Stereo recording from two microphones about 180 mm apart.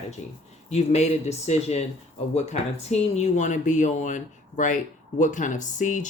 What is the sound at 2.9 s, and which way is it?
Speech, 35° left (ahead or behind).